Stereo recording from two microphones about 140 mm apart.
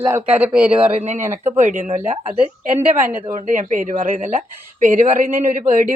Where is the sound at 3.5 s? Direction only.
70° right (ahead or behind).